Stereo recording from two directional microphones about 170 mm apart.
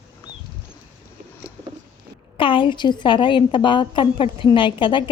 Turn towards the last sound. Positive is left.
turn(degrees=30)  # may be behind; listen again after turning